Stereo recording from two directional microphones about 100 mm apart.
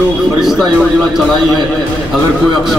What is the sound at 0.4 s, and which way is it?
Speech, 5° right (ahead or behind).